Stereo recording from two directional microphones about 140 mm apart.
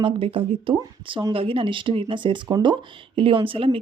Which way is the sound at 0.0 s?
40° right (ahead or behind).